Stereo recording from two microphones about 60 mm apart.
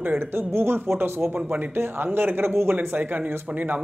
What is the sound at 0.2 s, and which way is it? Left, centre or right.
A man's voice, right.